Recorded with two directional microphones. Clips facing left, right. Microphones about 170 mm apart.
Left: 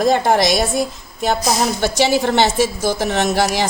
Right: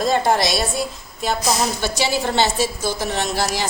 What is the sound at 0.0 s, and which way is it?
A woman's voice, 55° left (ahead or behind).